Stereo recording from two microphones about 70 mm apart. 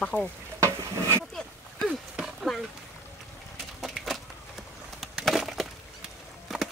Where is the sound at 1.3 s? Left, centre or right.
Centre.